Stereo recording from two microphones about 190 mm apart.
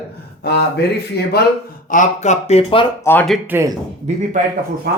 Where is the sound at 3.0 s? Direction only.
10° left (ahead or behind).